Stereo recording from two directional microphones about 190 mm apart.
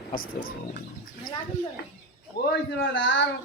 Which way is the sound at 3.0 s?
70° left (ahead or behind).